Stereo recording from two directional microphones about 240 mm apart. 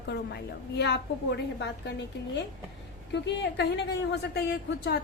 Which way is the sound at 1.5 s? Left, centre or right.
Left.